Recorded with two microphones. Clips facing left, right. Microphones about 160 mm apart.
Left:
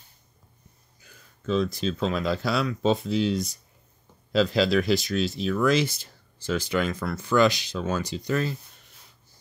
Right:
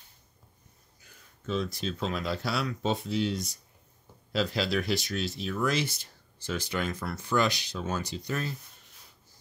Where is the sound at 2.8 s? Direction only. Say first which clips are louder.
Left 7 dB; 90° left.